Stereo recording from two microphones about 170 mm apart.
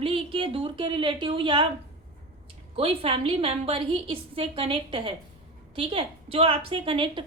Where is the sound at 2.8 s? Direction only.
35° right (ahead or behind).